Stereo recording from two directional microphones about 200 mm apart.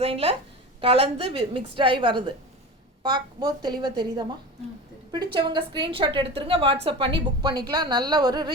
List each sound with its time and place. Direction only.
0.0 s a woman's voice: 30° right (ahead or behind)